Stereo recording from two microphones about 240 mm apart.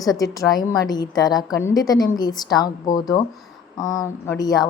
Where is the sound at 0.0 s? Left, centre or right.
Centre.